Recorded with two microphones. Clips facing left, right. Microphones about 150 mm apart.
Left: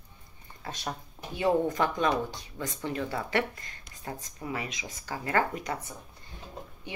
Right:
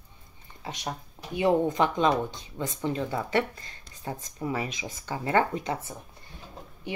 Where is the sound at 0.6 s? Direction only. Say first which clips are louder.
Right 1 dB; 20° right (ahead or behind).